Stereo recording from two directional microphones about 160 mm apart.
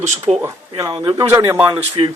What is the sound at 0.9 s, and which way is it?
Speech, 30° right (ahead or behind).